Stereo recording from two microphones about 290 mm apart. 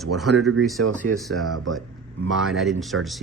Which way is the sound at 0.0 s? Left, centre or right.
Centre.